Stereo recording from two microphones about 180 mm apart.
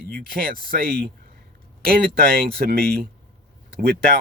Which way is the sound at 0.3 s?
55° right (ahead or behind).